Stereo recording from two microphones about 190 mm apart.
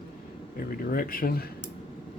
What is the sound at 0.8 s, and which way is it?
Speech, 50° left (ahead or behind).